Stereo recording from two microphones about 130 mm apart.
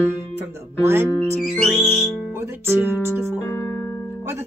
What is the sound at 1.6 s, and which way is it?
Music, centre (ahead or behind).